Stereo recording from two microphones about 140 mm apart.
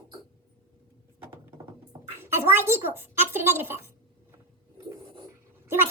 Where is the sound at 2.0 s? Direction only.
15° right (ahead or behind).